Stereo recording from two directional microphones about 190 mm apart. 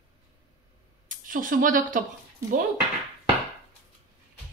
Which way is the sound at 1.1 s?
45° right (ahead or behind).